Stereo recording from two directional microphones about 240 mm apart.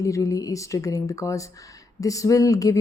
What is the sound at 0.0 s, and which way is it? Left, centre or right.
Speech, centre.